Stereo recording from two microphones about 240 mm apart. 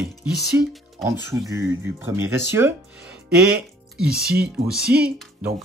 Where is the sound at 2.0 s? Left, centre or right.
Centre.